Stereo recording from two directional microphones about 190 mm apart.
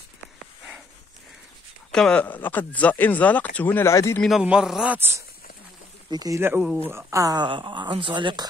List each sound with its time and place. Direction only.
1.9 s speech: 5° left (ahead or behind)
4.2 s speech: 5° right (ahead or behind); by 8.5 s 25° right (ahead or behind)